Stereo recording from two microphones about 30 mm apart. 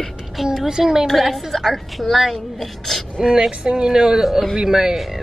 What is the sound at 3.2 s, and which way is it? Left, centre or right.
Speech, centre.